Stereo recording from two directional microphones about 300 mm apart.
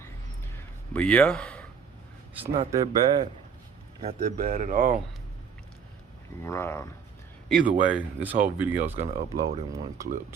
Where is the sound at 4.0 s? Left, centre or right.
Right.